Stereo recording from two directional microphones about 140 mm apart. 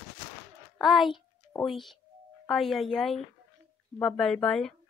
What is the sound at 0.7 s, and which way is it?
A woman's voice, centre (ahead or behind).